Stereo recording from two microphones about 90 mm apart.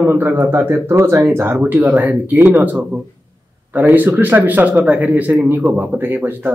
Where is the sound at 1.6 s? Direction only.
15° right (ahead or behind).